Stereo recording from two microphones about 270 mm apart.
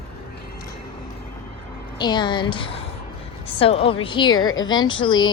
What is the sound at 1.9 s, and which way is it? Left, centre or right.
A woman's voice, centre.